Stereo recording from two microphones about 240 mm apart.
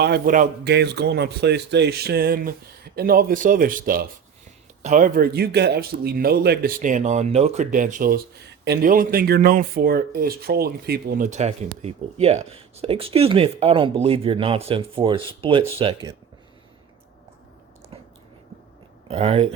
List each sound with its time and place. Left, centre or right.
0.0 s a man's voice: right
19.0 s speech: right